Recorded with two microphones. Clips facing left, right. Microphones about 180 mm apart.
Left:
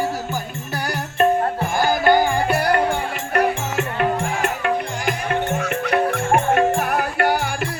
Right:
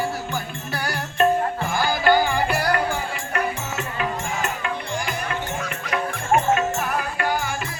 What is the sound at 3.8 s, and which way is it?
Music, 60° left (ahead or behind).